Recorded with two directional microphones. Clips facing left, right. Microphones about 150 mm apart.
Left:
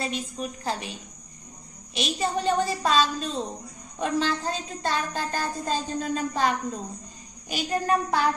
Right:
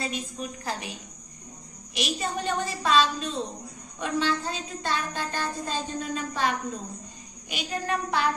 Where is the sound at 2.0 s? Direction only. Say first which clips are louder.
Left 3 dB; 35° left (ahead or behind).